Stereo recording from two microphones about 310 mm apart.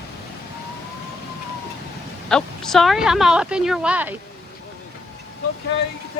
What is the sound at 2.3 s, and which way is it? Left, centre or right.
A woman's voice, centre.